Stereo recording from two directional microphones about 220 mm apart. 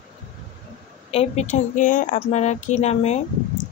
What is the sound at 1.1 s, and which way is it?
A woman's voice, 25° left (ahead or behind).